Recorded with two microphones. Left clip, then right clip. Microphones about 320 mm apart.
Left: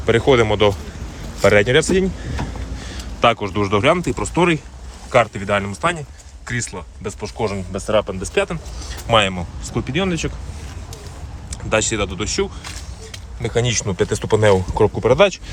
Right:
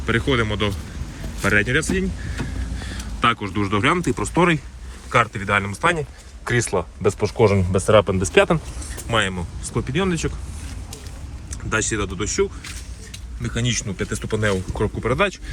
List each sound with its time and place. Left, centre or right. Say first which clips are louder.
0.0 s speech: left 7 dB; centre
9.0 s speech: left 6 dB; centre
11.5 s speech: left 4 dB; centre
13.4 s speech: left 6 dB; centre
14.3 s speech: left 8 dB; left